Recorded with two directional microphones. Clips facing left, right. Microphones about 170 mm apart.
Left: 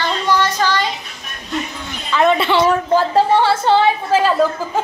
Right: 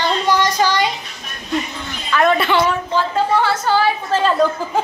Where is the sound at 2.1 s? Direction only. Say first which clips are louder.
Left 1 dB; 20° left (ahead or behind).